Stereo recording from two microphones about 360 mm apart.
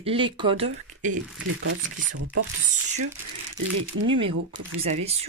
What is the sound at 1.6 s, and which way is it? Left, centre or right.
Speech, right.